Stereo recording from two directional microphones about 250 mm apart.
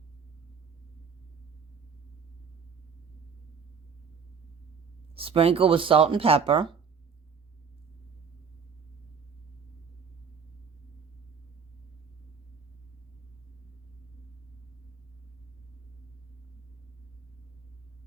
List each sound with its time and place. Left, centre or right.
5.1 s speech: right